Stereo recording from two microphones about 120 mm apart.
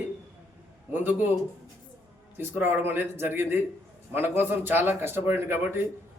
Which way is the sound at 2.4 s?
15° right (ahead or behind).